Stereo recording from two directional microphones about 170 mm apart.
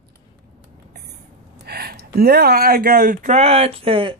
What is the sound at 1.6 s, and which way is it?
Speech, 65° right (ahead or behind).